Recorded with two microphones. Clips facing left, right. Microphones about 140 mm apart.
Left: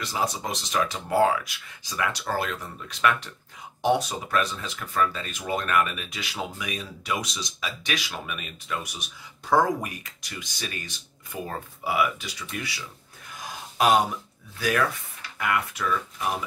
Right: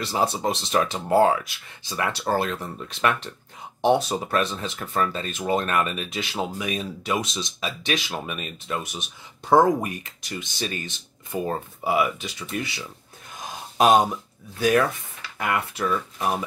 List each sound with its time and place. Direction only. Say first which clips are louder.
0.0 s speech: right 5 dB; 30° right (ahead or behind)
13.4 s a sound: right 4 dB; 25° right (ahead or behind)
14.6 s speech: right 5 dB; 25° right (ahead or behind)